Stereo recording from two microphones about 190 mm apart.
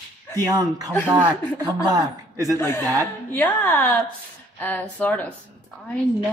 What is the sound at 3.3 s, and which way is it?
A woman's voice, 10° left (ahead or behind).